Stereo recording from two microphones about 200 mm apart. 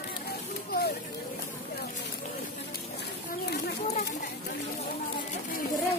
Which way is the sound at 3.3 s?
50° left (ahead or behind).